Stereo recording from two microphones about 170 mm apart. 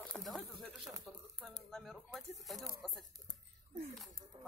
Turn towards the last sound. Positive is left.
turn(degrees=-35)  # may be behind; listen again after turning